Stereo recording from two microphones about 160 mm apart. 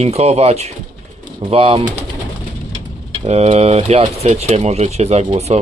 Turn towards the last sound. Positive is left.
turn(degrees=-45)  # may be behind; listen again after turning